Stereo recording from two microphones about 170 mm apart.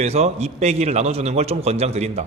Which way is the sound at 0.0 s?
40° right (ahead or behind).